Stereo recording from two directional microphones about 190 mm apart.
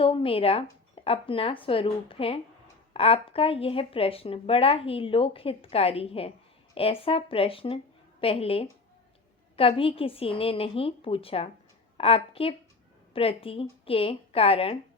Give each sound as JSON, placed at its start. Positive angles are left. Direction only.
{"t": 0.0, "sound": "a woman's voice", "side_deg": 30}